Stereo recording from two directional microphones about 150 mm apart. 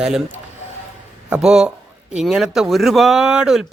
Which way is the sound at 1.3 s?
5° right (ahead or behind).